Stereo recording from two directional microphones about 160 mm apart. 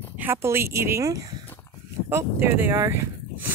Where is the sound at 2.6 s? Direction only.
15° right (ahead or behind).